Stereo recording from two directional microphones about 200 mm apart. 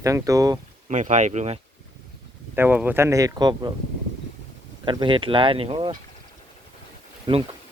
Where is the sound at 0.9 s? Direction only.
35° right (ahead or behind).